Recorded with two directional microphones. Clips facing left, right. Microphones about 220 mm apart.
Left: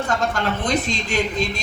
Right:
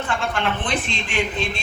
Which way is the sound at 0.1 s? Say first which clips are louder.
Even; 40° left (ahead or behind).